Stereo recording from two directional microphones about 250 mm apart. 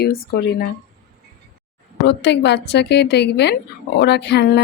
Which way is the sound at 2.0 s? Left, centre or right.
Left.